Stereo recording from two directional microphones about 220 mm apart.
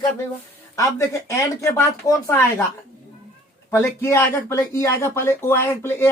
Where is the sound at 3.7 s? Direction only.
10° left (ahead or behind).